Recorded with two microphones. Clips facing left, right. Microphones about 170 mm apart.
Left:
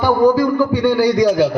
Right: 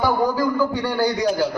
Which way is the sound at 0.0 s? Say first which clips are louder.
Left 7 dB; 80° left.